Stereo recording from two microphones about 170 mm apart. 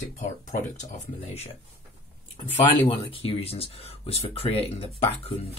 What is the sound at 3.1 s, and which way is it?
Speech, 35° left (ahead or behind).